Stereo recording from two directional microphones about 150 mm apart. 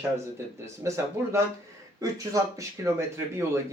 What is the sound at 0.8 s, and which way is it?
Speech, 20° right (ahead or behind).